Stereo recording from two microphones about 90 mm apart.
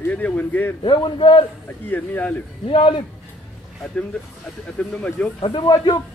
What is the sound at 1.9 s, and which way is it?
Speech, 20° left (ahead or behind).